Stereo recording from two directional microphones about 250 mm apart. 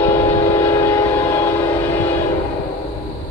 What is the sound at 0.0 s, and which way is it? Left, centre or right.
Train, centre.